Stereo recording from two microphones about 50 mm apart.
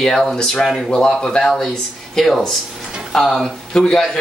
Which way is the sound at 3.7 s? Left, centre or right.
Centre.